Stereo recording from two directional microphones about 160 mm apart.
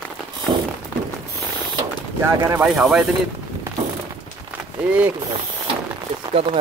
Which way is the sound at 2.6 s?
5° right (ahead or behind).